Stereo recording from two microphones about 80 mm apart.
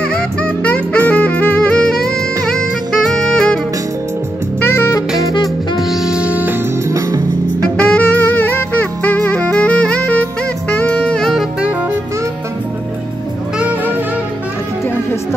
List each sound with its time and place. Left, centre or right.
0.0 s music: centre
4.6 s saxophone: left
5.8 s music: centre
6.9 s music: right
7.9 s music: left
10.9 s saxophone: centre